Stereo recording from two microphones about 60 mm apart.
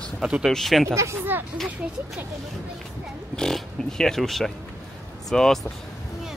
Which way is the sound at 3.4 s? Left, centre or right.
Centre.